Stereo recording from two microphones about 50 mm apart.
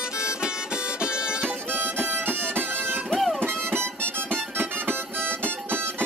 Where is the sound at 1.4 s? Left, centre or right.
Right.